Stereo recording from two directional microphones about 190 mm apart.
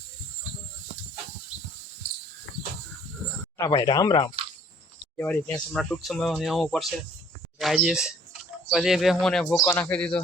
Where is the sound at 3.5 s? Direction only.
20° left (ahead or behind).